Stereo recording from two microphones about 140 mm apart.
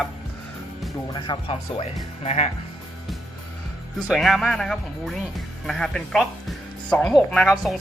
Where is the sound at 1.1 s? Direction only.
35° left (ahead or behind).